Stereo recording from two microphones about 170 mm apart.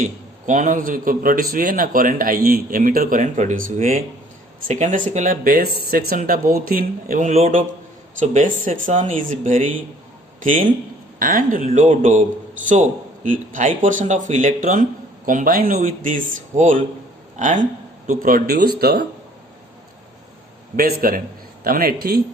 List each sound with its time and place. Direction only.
0.0 s a man's voice: 45° right (ahead or behind); by 19.0 s 65° right (ahead or behind)
20.7 s a man's voice: 60° right (ahead or behind)